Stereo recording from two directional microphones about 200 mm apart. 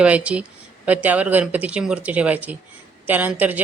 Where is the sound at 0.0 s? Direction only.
5° right (ahead or behind).